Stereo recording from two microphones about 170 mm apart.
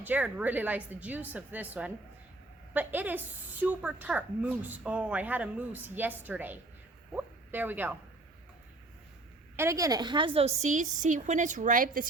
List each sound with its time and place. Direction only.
0.0 s speech: 10° right (ahead or behind)
9.6 s a woman's voice: 20° right (ahead or behind); by 12.0 s 50° right (ahead or behind)